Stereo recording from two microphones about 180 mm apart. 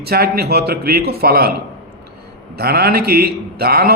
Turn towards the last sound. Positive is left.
turn(degrees=-60)  # may be behind; listen again after turning